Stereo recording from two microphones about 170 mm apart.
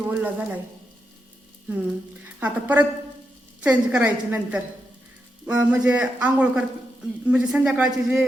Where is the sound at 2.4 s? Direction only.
10° right (ahead or behind).